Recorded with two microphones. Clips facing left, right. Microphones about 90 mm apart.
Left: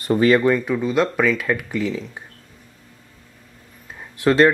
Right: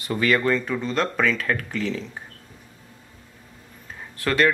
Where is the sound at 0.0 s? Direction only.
30° left (ahead or behind).